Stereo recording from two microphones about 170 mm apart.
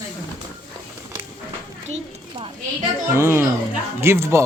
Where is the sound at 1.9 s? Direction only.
35° right (ahead or behind).